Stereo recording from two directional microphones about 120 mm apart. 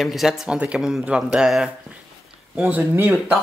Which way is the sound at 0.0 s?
Centre (ahead or behind).